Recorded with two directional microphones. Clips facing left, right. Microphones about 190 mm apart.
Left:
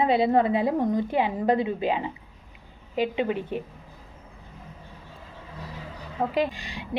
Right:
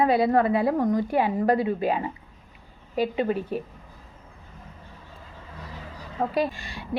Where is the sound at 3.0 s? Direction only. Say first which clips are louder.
Right 1 dB; 40° right (ahead or behind).